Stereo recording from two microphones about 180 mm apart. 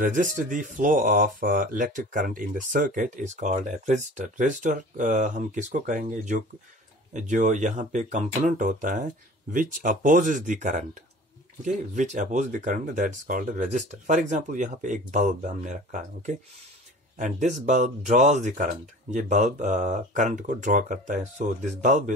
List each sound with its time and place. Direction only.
0.0 s speech: 45° right (ahead or behind)